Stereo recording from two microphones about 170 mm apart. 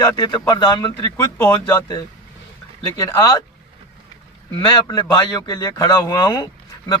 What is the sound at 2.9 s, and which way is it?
Speech, 20° left (ahead or behind).